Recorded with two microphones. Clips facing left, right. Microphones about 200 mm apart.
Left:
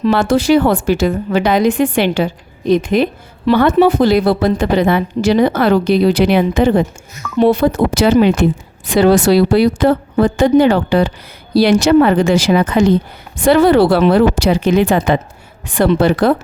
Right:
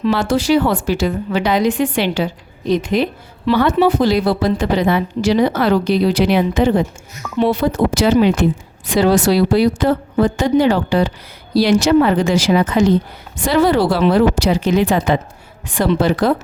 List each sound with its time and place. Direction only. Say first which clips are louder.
0.0 s a woman's voice: left 3 dB; 55° left (ahead or behind)